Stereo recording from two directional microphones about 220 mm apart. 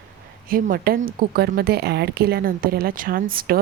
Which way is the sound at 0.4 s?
40° right (ahead or behind).